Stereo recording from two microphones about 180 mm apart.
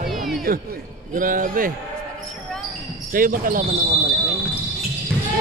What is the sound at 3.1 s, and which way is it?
Speech, 50° right (ahead or behind).